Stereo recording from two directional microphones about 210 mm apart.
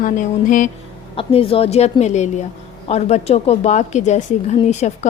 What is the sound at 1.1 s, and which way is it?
A woman's voice, 25° left (ahead or behind).